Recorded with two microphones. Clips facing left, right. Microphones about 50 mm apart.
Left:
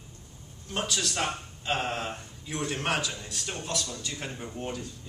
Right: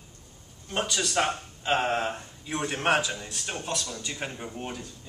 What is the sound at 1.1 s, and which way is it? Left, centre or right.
A man's voice, right.